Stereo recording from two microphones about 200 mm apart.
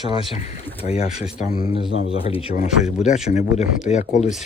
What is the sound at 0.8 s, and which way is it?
Speech, 30° left (ahead or behind).